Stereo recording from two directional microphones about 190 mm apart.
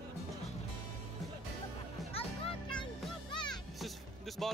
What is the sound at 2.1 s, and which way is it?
Music, 30° left (ahead or behind).